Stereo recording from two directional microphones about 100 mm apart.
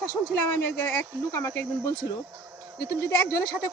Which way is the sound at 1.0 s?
25° left (ahead or behind).